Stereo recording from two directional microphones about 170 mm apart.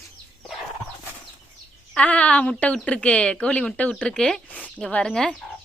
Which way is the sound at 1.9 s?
5° left (ahead or behind).